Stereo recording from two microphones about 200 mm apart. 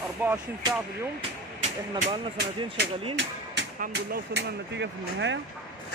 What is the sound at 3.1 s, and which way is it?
Speech, 60° right (ahead or behind).